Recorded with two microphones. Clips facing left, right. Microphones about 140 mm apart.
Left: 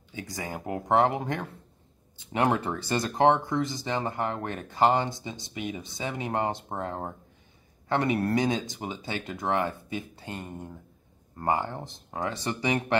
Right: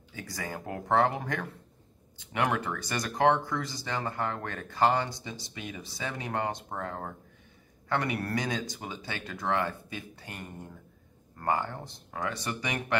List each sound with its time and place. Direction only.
0.1 s speech: 20° left (ahead or behind)